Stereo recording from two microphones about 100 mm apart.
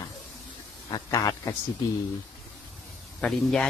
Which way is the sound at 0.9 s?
40° left (ahead or behind).